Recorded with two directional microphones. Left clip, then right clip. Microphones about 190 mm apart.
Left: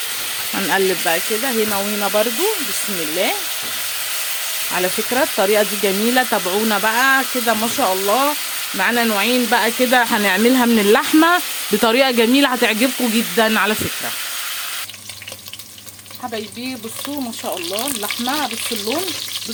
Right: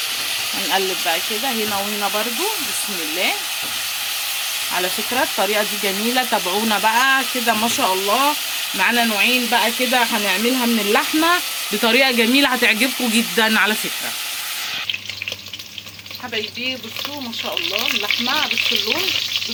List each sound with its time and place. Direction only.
0.7 s speech: 55° left (ahead or behind)
1.7 s frying: 40° left (ahead or behind)
4.7 s frying: 45° left (ahead or behind)
8.8 s speech: 45° left (ahead or behind)
13.3 s frying: 30° left (ahead or behind)